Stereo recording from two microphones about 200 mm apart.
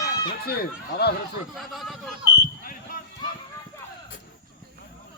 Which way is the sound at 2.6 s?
45° left (ahead or behind).